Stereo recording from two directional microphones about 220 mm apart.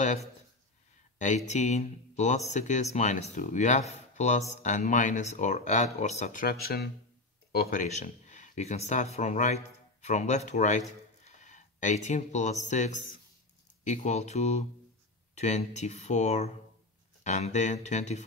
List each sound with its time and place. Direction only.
0.0 s speech: 30° left (ahead or behind)
1.1 s a sound: 35° left (ahead or behind)
1.5 s speech: 30° left (ahead or behind)